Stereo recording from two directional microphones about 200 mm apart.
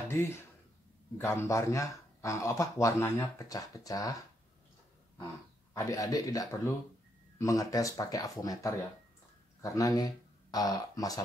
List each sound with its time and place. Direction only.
0.1 s speech: 15° left (ahead or behind)
5.8 s speech: 15° left (ahead or behind)